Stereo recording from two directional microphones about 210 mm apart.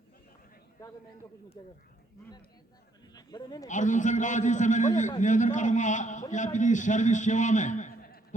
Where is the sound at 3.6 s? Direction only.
35° left (ahead or behind).